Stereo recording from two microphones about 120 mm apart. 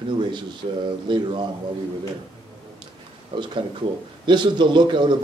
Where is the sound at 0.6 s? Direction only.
50° right (ahead or behind).